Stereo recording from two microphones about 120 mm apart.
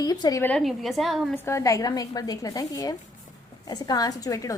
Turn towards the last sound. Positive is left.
turn(degrees=30)  # may be behind; listen again after turning